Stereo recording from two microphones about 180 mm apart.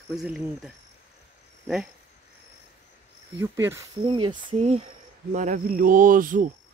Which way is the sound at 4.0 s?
25° right (ahead or behind).